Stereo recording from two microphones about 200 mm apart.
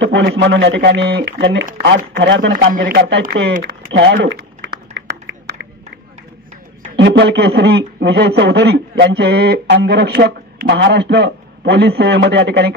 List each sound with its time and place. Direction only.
0.0 s speech: 60° right (ahead or behind)
3.6 s a sound: 60° right (ahead or behind)
7.0 s speech: 60° right (ahead or behind)